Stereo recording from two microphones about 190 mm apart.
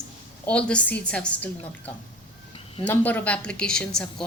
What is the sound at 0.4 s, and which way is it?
A woman's voice, 5° left (ahead or behind).